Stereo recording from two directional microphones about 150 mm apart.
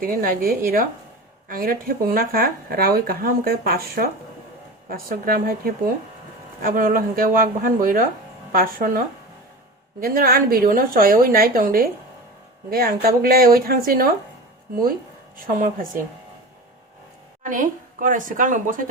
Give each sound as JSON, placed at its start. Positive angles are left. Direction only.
{"t": 0.0, "sound": "a woman's voice", "side_deg": -70}
{"t": 12.7, "sound": "speech", "side_deg": -90}
{"t": 15.4, "sound": "a woman's voice", "side_deg": -65}
{"t": 17.4, "sound": "a woman's voice", "side_deg": -60}